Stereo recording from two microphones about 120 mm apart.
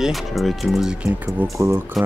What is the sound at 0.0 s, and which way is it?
Speech, centre (ahead or behind).